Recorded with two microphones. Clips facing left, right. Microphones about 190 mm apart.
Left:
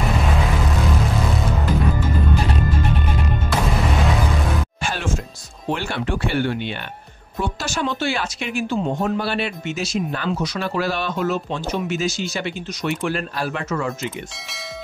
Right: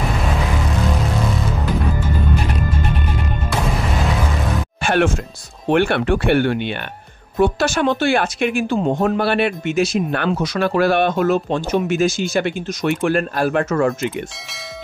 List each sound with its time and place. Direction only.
4.8 s music: 65° right (ahead or behind)
5.7 s speech: 65° right (ahead or behind)